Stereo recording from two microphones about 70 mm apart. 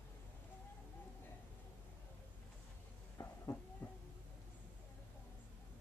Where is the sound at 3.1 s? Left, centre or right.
Left.